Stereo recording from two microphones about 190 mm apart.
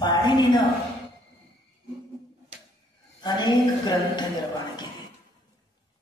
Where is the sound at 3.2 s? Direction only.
20° left (ahead or behind).